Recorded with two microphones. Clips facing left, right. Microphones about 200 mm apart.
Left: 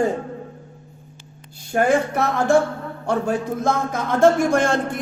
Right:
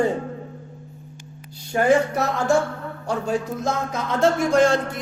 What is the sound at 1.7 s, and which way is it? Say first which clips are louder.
Music: even; 55° left (ahead or behind).